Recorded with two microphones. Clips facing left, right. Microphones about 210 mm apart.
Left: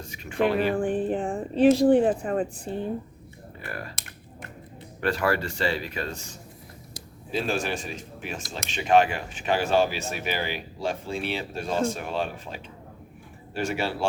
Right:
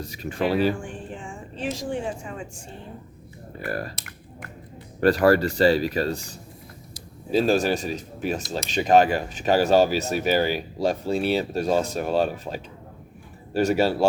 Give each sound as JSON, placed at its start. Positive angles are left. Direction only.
{"t": 0.0, "sound": "speech", "side_deg": -35}
{"t": 0.8, "sound": "music", "side_deg": 55}
{"t": 1.5, "sound": "speech", "side_deg": 60}
{"t": 3.7, "sound": "speech", "side_deg": -40}
{"t": 4.9, "sound": "speech", "side_deg": -40}
{"t": 7.3, "sound": "speech", "side_deg": -35}